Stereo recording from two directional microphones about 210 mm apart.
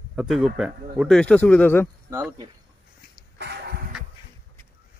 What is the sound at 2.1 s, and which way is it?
Speech, 15° right (ahead or behind).